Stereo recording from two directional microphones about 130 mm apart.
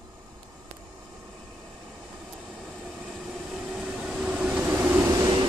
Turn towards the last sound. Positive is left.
turn(degrees=-30)  # may be behind; listen again after turning